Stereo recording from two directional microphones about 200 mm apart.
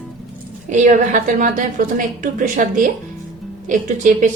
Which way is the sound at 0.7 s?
40° right (ahead or behind).